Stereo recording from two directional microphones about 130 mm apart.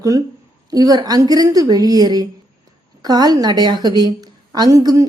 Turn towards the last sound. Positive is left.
turn(degrees=-25)  # may be behind; listen again after turning